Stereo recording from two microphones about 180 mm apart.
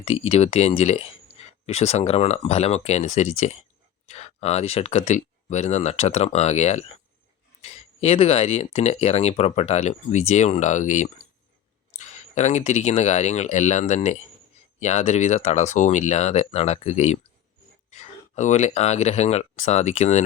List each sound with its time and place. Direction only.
0.0 s speech: 35° left (ahead or behind)